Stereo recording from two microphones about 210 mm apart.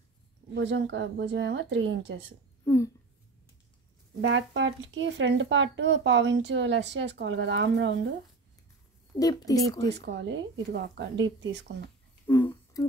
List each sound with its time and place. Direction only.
0.6 s speech: 60° right (ahead or behind)
2.6 s a sound: 15° left (ahead or behind)
4.2 s speech: 60° right (ahead or behind)
9.1 s a woman's voice: 15° left (ahead or behind)
9.8 s speech: 55° right (ahead or behind)
12.3 s humming: 15° left (ahead or behind)